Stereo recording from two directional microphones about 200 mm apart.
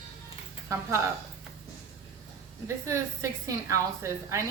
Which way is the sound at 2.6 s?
15° right (ahead or behind).